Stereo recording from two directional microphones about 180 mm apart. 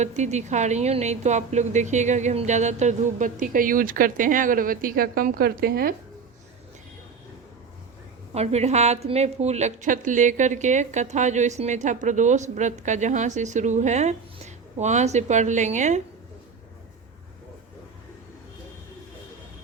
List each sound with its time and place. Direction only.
0.0 s a woman's voice: 40° right (ahead or behind); by 5.9 s 55° right (ahead or behind)
8.3 s a woman's voice: 35° right (ahead or behind)